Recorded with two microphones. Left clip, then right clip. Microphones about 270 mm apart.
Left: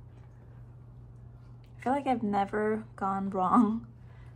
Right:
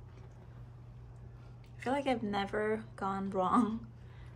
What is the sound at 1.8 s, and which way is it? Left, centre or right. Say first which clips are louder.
A woman's voice: left 4 dB; centre.